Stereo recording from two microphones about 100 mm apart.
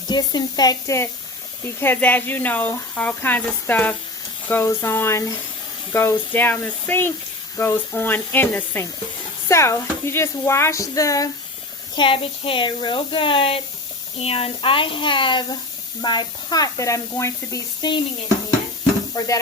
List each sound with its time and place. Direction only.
0.1 s speech: 45° left (ahead or behind)
1.8 s speech: 20° left (ahead or behind)
11.9 s speech: 60° left (ahead or behind)
14.2 s speech: 85° left; by 15.4 s 55° left (ahead or behind)
16.0 s speech: 45° left (ahead or behind)
17.8 s sizzle: 45° left (ahead or behind)
19.1 s speech: 40° left (ahead or behind)